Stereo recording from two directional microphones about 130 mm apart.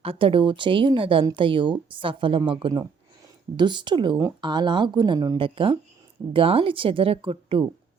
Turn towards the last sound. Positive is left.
turn(degrees=-45)  # may be behind; listen again after turning